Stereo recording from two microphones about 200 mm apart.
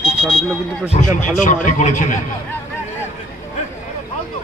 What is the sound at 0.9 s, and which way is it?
Speech, 40° left (ahead or behind).